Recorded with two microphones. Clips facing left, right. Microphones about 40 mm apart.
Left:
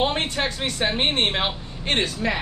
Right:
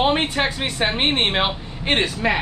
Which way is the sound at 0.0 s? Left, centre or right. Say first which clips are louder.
Right 4 dB; centre.